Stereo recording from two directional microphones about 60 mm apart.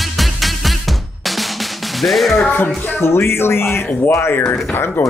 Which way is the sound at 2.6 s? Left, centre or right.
Left.